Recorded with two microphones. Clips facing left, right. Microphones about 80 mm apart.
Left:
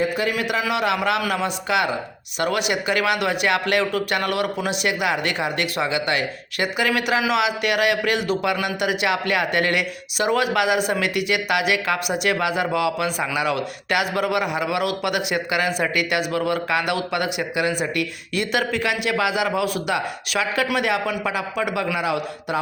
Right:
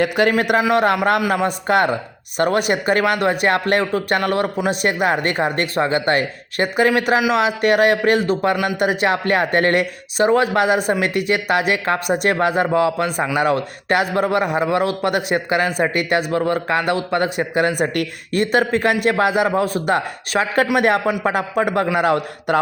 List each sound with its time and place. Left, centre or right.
0.0 s a man's voice: right